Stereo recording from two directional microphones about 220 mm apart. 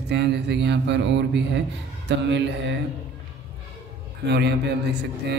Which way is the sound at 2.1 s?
55° right (ahead or behind).